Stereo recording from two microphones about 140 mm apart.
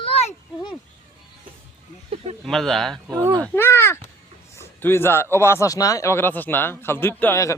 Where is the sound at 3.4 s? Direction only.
15° left (ahead or behind).